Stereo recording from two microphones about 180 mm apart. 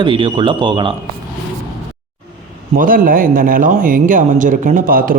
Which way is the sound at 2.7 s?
50° right (ahead or behind).